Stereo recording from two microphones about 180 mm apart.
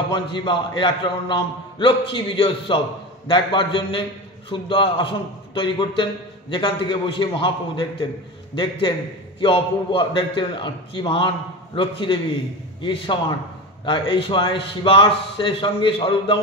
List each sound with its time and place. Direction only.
0.1 s a man's voice: 25° left (ahead or behind)
9.4 s a man's voice: 25° left (ahead or behind)